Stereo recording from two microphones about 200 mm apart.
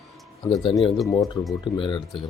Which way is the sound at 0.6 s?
25° left (ahead or behind).